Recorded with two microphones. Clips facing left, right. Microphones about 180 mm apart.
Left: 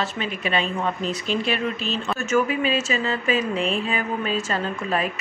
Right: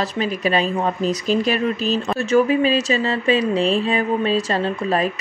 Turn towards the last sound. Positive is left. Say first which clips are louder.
# right 5 dB
turn(degrees=-35)  # may be behind; listen again after turning